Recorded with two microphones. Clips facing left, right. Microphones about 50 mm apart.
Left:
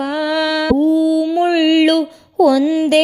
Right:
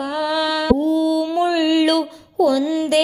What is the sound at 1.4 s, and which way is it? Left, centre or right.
Music, left.